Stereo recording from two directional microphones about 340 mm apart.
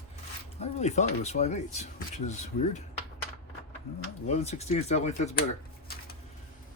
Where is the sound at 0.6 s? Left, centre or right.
Centre.